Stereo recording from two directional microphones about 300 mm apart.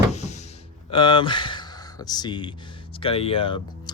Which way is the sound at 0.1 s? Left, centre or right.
Left.